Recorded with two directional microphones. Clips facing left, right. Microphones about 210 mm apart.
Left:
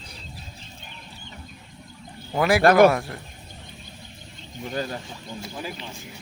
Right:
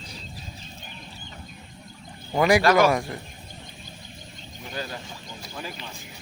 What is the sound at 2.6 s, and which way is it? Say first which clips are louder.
Speech: left 8 dB; 55° left (ahead or behind).